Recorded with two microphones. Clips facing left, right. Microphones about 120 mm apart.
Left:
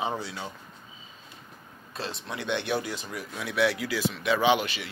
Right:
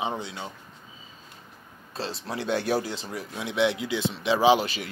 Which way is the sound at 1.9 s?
30° right (ahead or behind).